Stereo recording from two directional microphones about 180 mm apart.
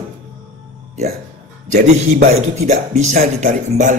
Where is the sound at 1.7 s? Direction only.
40° right (ahead or behind).